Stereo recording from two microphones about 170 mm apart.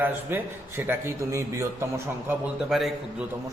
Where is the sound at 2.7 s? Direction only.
Centre (ahead or behind).